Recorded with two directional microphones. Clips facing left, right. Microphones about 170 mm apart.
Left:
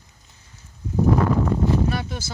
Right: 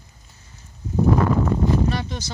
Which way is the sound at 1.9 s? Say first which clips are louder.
Right 1 dB; 5° left (ahead or behind).